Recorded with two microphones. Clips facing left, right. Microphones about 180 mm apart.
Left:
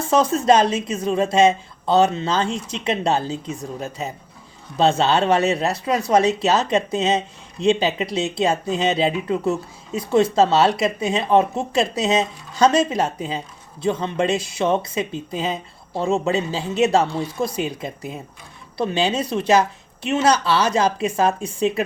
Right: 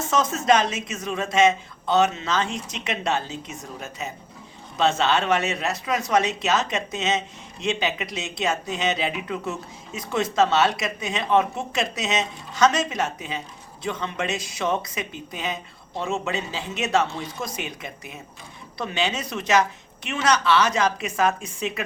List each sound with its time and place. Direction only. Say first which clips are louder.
0.0 s speech: left 6 dB; 30° left (ahead or behind)